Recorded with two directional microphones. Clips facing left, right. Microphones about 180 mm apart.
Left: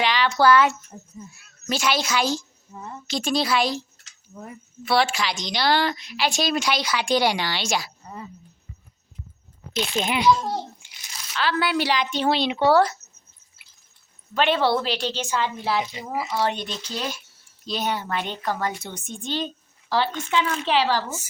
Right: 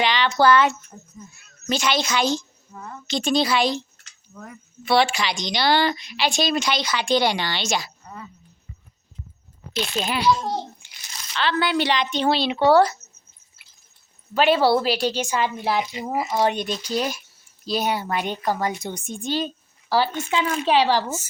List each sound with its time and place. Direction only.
0.0 s a woman's voice: centre (ahead or behind)
9.7 s a child's voice: 20° left (ahead or behind)
11.3 s a woman's voice: 5° left (ahead or behind)
12.6 s a woman's voice: centre (ahead or behind)
14.3 s a woman's voice: 5° right (ahead or behind)